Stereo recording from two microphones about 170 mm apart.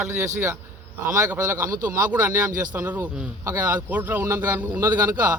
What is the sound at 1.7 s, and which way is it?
Speech, 55° right (ahead or behind).